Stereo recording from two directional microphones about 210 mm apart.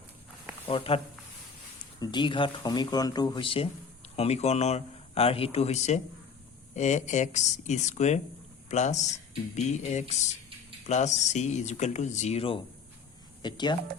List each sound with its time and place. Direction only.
0.7 s speech: 25° left (ahead or behind)